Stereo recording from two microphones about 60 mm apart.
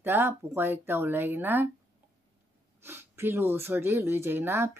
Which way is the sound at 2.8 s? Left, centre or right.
Right.